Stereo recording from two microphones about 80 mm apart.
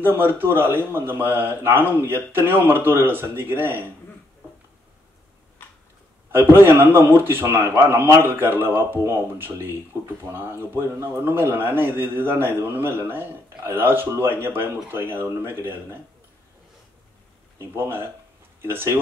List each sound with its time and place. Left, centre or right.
0.0 s speech: right
6.3 s speech: right
17.6 s speech: right